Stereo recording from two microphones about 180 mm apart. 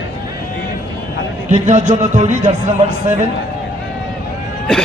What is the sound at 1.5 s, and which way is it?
Speech, 45° right (ahead or behind).